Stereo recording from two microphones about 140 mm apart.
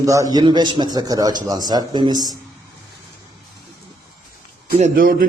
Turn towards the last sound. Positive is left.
turn(degrees=-90)